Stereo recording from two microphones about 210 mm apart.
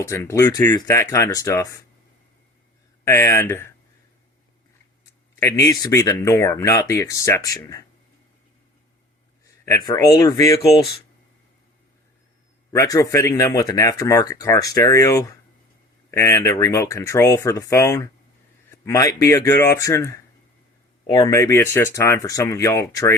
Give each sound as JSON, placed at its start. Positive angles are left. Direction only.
{"t": 0.1, "sound": "speech", "side_deg": 10}
{"t": 3.0, "sound": "speech", "side_deg": 10}
{"t": 5.4, "sound": "speech", "side_deg": 15}
{"t": 9.6, "sound": "speech", "side_deg": 15}
{"t": 12.7, "sound": "speech", "side_deg": 15}